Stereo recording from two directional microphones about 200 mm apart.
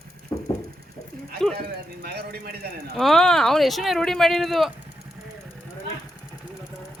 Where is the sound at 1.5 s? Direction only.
50° right (ahead or behind).